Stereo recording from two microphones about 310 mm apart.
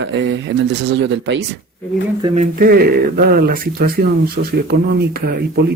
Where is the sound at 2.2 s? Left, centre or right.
Right.